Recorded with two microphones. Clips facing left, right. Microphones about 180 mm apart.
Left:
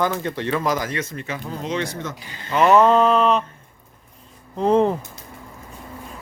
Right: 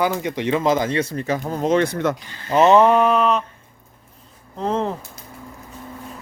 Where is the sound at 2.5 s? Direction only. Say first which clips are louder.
Right 1 dB; 25° right (ahead or behind); by 3.4 s 5° right (ahead or behind).